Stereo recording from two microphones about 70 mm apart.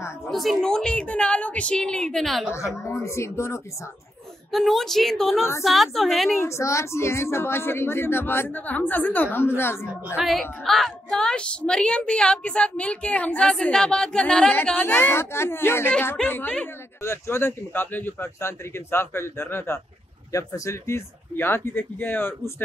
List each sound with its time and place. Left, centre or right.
0.3 s a woman's voice: centre
2.5 s speech: left
4.5 s a woman's voice: centre
6.4 s speech: left
10.1 s a woman's voice: centre
13.5 s a woman's voice: centre
14.7 s speech: left
15.0 s speech: left
17.0 s speech: left
20.3 s speech: left